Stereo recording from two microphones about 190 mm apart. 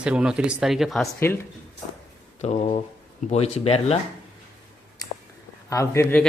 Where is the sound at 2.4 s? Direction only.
35° left (ahead or behind).